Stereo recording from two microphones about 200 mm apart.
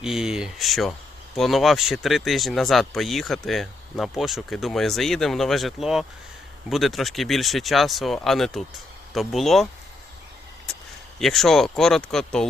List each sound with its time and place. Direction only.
0.0 s speech: 5° right (ahead or behind)
11.2 s speech: centre (ahead or behind)